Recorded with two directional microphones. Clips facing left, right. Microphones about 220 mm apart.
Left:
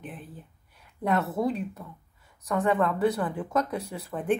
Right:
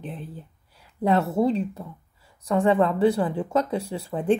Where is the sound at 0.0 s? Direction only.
30° right (ahead or behind).